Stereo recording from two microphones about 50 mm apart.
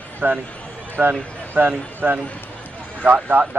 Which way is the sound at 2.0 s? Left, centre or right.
Right.